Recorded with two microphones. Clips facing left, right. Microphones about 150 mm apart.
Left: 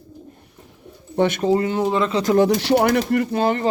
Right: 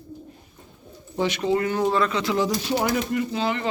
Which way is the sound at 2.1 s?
35° left (ahead or behind).